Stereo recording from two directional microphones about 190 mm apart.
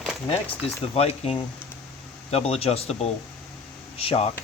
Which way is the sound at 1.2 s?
35° left (ahead or behind).